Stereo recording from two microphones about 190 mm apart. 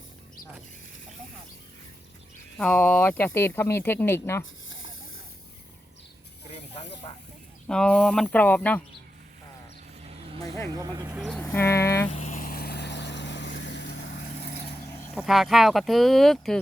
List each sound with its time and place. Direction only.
2.6 s speech: 10° left (ahead or behind)
7.7 s speech: 5° left (ahead or behind)
10.4 s speech: 15° left (ahead or behind)
10.7 s speech: 20° right (ahead or behind)
11.2 s speech: centre (ahead or behind)
11.4 s speech: 15° left (ahead or behind)
12.1 s vehicle: 40° left (ahead or behind); by 14.5 s 60° left (ahead or behind)
15.2 s speech: centre (ahead or behind)